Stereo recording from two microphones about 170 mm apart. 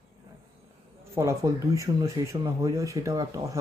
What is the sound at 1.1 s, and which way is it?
Speech, 15° right (ahead or behind).